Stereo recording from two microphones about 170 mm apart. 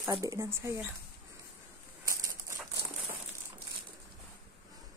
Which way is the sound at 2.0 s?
15° right (ahead or behind).